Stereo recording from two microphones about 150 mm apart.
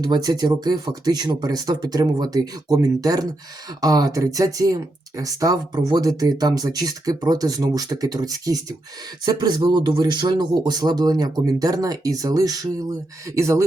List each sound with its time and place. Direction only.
0.0 s speech: 25° right (ahead or behind)